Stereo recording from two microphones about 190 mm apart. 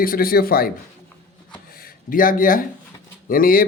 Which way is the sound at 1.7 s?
50° left (ahead or behind).